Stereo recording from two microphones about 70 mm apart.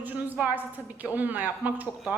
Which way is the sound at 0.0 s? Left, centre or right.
Right.